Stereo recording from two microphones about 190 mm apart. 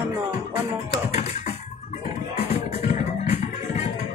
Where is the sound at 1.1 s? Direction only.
35° left (ahead or behind).